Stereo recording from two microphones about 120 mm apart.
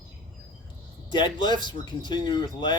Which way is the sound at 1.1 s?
40° left (ahead or behind).